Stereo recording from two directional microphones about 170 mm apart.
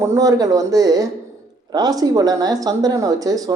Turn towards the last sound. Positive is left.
turn(degrees=-20)  # may be behind; listen again after turning